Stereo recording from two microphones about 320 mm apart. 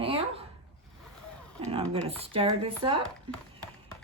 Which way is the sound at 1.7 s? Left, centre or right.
Centre.